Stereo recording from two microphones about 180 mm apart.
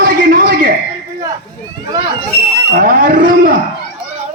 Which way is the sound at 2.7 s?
50° right (ahead or behind).